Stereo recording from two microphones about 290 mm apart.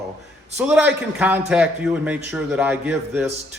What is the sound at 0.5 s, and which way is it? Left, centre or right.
A man's voice, centre.